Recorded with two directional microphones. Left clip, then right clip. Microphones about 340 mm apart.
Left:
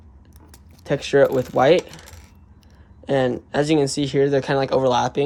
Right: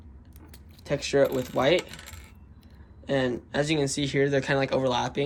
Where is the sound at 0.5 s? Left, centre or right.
Left.